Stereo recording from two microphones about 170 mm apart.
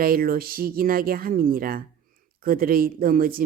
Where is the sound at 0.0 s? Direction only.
60° right (ahead or behind).